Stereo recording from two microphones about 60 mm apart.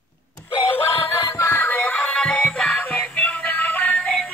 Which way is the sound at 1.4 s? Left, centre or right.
Left.